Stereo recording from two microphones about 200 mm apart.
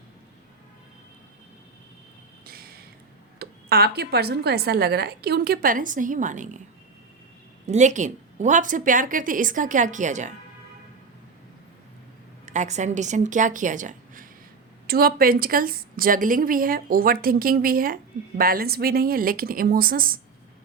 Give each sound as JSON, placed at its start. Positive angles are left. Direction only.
{"t": 2.4, "sound": "a sound", "side_deg": -50}
{"t": 3.3, "sound": "a woman's voice", "side_deg": -50}
{"t": 7.7, "sound": "a woman's voice", "side_deg": -35}
{"t": 12.5, "sound": "a woman's voice", "side_deg": -35}